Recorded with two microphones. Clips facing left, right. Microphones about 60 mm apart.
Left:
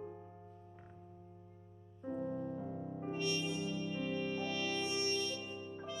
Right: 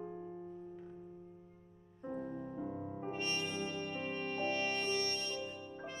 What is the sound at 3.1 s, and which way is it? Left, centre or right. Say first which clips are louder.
Music: left 2 dB; right.